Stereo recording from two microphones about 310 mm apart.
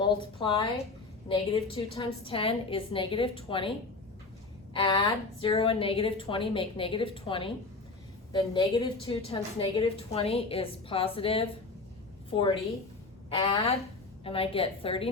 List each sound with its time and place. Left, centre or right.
0.0 s a woman's voice: centre
4.7 s a woman's voice: centre